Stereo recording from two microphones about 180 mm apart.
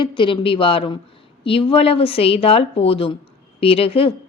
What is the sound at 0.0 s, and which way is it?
A woman's voice, 25° left (ahead or behind).